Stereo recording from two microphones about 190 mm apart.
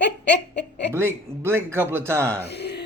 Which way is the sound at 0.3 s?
65° left (ahead or behind).